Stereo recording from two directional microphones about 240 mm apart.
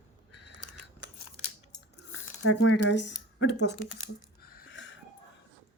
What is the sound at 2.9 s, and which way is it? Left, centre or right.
Speech, left.